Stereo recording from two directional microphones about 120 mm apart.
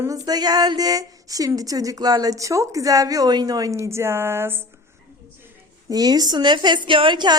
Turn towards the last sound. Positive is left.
turn(degrees=-40)  # may be behind; listen again after turning